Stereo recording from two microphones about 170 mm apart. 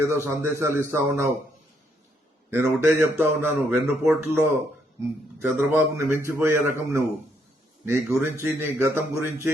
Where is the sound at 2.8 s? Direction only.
15° right (ahead or behind).